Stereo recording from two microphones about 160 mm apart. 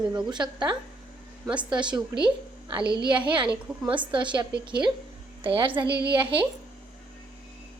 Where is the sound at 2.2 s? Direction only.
30° right (ahead or behind).